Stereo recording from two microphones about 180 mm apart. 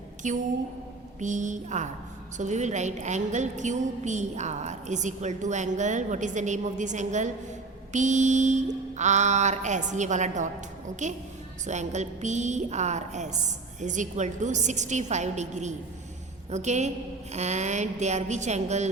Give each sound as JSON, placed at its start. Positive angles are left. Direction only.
{"t": 0.2, "sound": "a woman's voice", "side_deg": -45}